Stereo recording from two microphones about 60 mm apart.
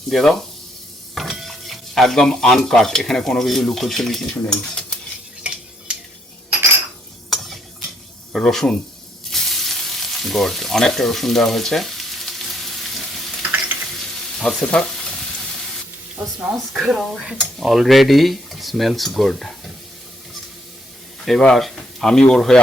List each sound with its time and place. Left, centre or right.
0.1 s speech: centre
1.1 s stir: centre
4.4 s speech: centre
5.4 s a sound: centre
7.3 s stir: centre
8.3 s speech: centre
9.3 s frying: centre
14.6 s frying: centre
16.6 s speech: centre
21.2 s speech: centre